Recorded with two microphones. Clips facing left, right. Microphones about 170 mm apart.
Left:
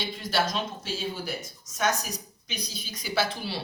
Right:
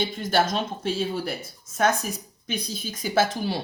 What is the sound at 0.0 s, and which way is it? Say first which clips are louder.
Speech: right 5 dB; 50° right (ahead or behind).